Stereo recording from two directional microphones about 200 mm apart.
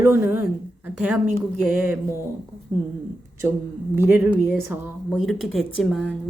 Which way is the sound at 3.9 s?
10° right (ahead or behind).